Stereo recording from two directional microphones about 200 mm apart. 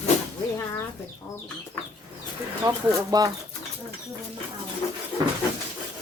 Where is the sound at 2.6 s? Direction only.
20° right (ahead or behind).